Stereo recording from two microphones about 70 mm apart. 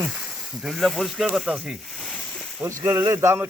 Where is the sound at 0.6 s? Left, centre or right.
Centre.